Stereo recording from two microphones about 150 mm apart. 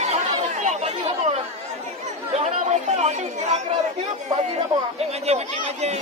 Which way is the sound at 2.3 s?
50° right (ahead or behind).